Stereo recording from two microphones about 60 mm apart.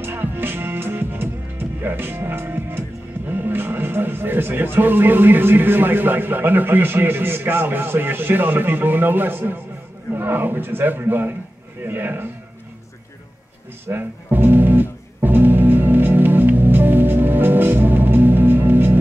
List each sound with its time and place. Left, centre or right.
0.0 s music: right
3.3 s speech: right
13.8 s music: right